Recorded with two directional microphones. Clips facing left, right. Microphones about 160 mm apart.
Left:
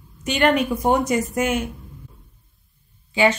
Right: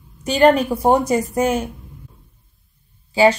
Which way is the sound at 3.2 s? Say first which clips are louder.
Right 4 dB; 35° right (ahead or behind).